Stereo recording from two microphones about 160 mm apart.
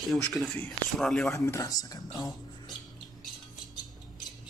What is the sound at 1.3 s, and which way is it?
Speech, 20° left (ahead or behind).